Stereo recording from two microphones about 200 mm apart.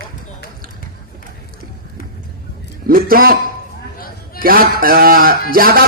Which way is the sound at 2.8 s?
45° right (ahead or behind).